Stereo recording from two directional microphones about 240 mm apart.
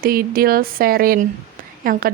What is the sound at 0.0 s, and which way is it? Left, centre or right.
A woman's voice, right.